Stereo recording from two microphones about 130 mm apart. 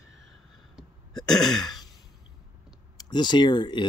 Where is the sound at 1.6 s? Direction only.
30° left (ahead or behind).